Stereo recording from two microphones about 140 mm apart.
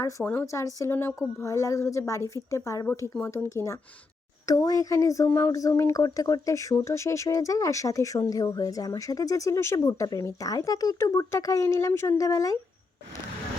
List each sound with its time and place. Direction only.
0.3 s speech: 20° left (ahead or behind)